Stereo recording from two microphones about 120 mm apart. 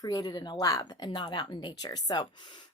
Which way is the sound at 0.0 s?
35° left (ahead or behind).